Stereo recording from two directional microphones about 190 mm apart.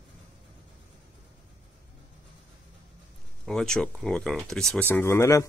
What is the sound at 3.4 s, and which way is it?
Speech, 5° left (ahead or behind).